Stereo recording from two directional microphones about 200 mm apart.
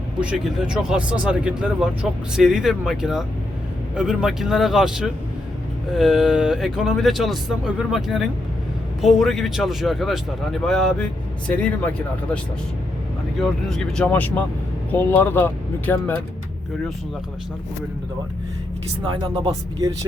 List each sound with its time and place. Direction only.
0.2 s speech: 5° right (ahead or behind)
13.4 s speech: centre (ahead or behind)
19.0 s speech: 25° right (ahead or behind)